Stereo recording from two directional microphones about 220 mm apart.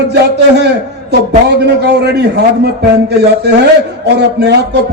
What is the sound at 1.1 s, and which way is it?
A man's voice, 50° right (ahead or behind).